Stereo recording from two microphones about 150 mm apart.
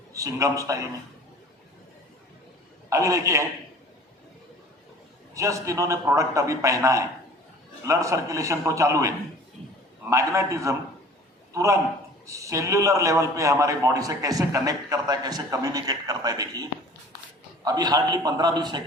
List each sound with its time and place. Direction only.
0.1 s a man's voice: 20° right (ahead or behind)
2.9 s a man's voice: 20° right (ahead or behind)
5.3 s a man's voice: 20° right (ahead or behind)